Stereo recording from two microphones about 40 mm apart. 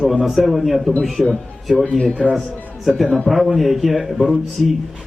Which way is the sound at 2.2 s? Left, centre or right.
Centre.